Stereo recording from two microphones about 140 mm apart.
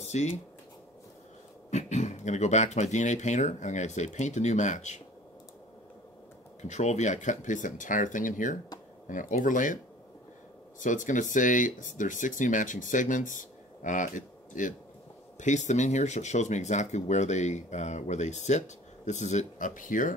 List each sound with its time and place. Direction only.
0.0 s speech: 55° left (ahead or behind)
1.7 s speech: 55° left (ahead or behind)
6.7 s speech: 55° left (ahead or behind)
10.8 s speech: 65° left (ahead or behind)